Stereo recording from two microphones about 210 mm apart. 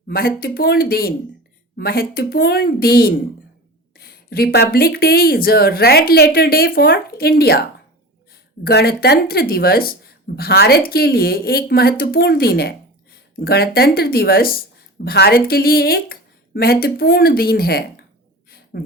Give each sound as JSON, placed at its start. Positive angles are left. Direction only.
{"t": 0.1, "sound": "speech", "side_deg": 45}
{"t": 8.6, "sound": "speech", "side_deg": 50}